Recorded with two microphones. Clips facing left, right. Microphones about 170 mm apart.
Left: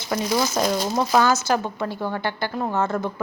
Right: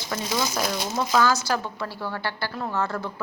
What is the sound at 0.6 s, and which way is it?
A woman's voice, 30° left (ahead or behind).